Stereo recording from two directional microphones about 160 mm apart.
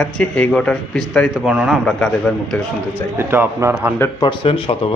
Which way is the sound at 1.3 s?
5° right (ahead or behind).